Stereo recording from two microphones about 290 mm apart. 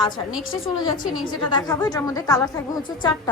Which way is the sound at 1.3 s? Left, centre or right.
Centre.